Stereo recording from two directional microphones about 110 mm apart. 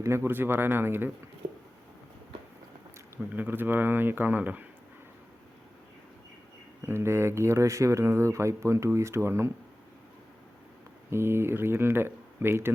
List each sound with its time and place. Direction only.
0.0 s speech: 25° right (ahead or behind)
1.4 s a sound: 90° right
3.3 s speech: 20° right (ahead or behind)
6.8 s speech: 25° right (ahead or behind)
11.1 s speech: 20° right (ahead or behind)